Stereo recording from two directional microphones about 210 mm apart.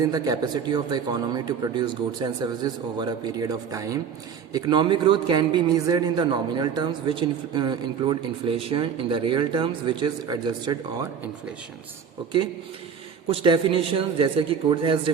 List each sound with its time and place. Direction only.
0.0 s speech: 20° right (ahead or behind)
13.3 s speech: 25° right (ahead or behind)